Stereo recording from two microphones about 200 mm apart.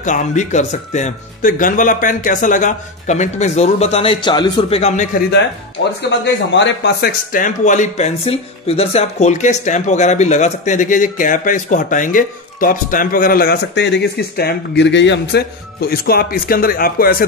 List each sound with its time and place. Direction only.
0.0 s speech: 40° left (ahead or behind)
6.0 s a man's voice: 60° left (ahead or behind)